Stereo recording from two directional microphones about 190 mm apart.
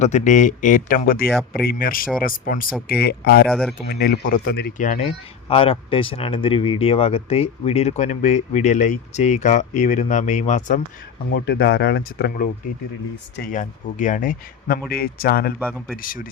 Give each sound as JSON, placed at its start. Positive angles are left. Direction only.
{"t": 0.0, "sound": "speech", "side_deg": 40}
{"t": 3.5, "sound": "speech", "side_deg": 5}
{"t": 3.8, "sound": "speech", "side_deg": 55}
{"t": 5.0, "sound": "speech", "side_deg": 30}
{"t": 11.3, "sound": "speech", "side_deg": 60}
{"t": 13.5, "sound": "speech", "side_deg": 40}